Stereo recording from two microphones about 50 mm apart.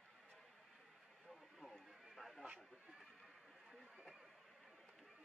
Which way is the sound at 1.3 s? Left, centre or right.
Centre.